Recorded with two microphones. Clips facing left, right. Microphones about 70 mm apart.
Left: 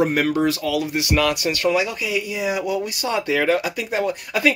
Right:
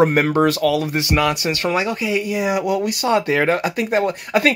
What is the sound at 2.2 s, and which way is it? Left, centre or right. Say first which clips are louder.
Speech: right 4 dB; right.